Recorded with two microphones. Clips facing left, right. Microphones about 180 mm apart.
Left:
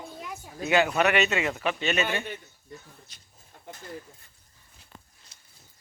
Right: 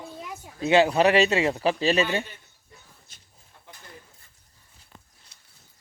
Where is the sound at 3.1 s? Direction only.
50° right (ahead or behind).